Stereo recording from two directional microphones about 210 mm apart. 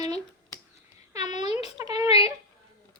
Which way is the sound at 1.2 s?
35° left (ahead or behind).